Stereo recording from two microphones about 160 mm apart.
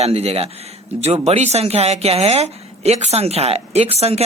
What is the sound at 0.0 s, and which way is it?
A woman's voice, 40° right (ahead or behind).